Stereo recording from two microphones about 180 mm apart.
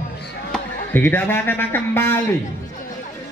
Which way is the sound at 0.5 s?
10° left (ahead or behind).